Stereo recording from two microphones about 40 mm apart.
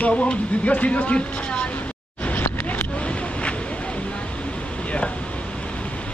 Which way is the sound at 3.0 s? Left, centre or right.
Left.